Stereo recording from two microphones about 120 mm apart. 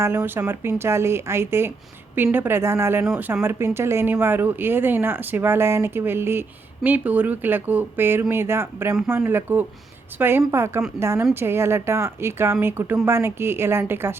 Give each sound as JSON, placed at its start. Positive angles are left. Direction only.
{"t": 0.0, "sound": "speech", "side_deg": -20}